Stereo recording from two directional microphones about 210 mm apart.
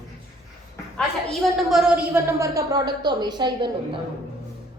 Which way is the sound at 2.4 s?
15° right (ahead or behind).